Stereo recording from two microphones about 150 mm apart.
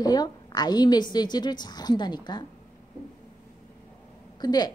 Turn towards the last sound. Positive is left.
turn(degrees=25)  # may be behind; listen again after turning